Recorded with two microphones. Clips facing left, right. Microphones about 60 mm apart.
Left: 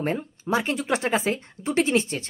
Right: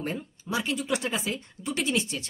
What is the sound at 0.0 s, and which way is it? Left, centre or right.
Speech, left.